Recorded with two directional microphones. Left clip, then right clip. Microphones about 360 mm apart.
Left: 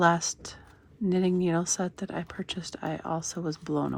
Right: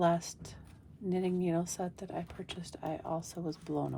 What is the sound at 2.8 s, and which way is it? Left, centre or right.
Speech, left.